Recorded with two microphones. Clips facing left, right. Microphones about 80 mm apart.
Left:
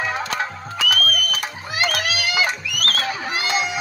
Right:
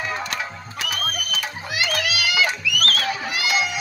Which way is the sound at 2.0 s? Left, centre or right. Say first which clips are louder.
Even; left.